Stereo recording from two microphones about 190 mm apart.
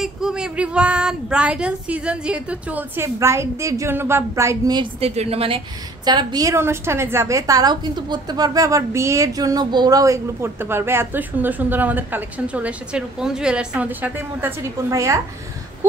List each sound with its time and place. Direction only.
0.0 s a woman's voice: 5° right (ahead or behind)
5.0 s a woman's voice: 35° right (ahead or behind)
6.0 s a woman's voice: 20° right (ahead or behind)